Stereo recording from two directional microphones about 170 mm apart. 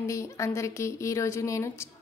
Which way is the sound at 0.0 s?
15° left (ahead or behind).